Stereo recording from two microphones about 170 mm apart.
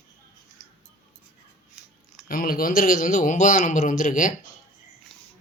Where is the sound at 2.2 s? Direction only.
55° left (ahead or behind).